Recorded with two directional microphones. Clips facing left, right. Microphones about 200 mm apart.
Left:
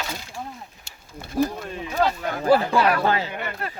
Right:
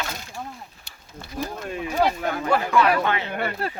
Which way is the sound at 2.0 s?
10° right (ahead or behind).